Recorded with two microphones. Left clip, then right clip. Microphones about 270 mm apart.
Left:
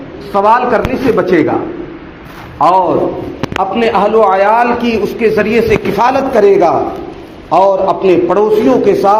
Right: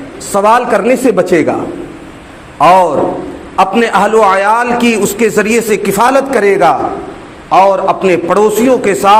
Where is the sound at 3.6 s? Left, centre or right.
Right.